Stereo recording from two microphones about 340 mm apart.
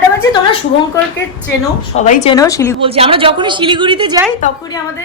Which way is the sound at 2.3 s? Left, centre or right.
Centre.